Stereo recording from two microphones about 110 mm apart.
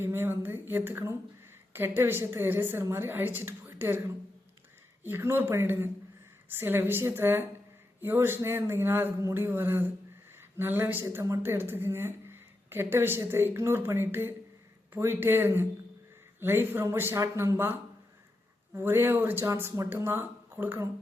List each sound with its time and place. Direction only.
0.0 s a woman's voice: 20° right (ahead or behind)